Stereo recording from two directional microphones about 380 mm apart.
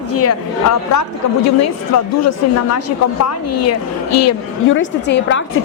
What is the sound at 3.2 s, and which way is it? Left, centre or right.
A woman's voice, left.